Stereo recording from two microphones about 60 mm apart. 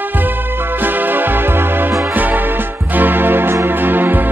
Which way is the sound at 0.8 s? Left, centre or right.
Right.